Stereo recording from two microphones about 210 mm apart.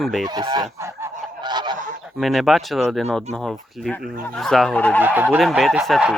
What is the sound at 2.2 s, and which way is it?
Speech, centre (ahead or behind).